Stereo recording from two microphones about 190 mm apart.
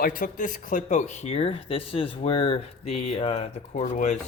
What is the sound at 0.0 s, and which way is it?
Speech, 45° left (ahead or behind).